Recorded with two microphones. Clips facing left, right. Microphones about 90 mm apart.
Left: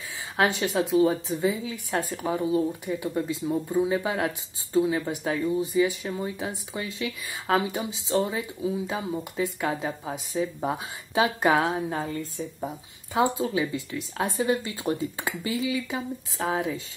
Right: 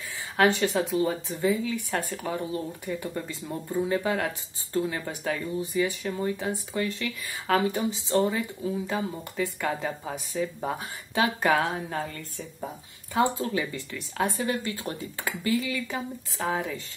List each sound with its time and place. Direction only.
0.4 s speech: centre (ahead or behind)
14.4 s speech: 20° left (ahead or behind)
16.3 s speech: 5° left (ahead or behind)